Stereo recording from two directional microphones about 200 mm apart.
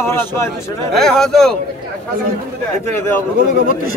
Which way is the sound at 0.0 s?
10° left (ahead or behind).